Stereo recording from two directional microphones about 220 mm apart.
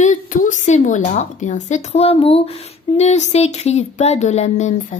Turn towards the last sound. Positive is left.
turn(degrees=30)  # may be behind; listen again after turning